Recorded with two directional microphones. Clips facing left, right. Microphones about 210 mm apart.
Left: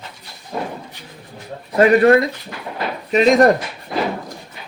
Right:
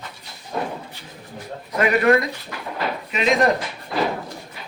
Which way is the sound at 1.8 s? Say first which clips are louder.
Left 6 dB; 35° left (ahead or behind).